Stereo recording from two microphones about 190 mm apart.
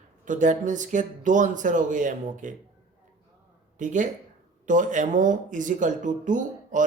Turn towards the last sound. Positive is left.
turn(degrees=-40)  # may be behind; listen again after turning